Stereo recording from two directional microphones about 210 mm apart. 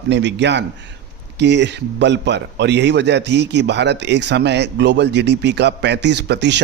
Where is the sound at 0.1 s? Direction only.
55° right (ahead or behind).